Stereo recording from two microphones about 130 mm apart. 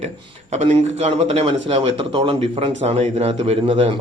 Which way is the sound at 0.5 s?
55° right (ahead or behind).